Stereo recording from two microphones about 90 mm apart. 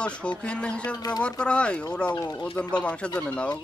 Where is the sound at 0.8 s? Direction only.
45° left (ahead or behind).